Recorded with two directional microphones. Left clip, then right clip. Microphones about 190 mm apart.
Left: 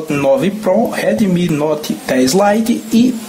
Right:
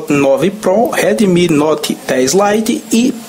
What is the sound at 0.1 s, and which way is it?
Speech, 15° right (ahead or behind).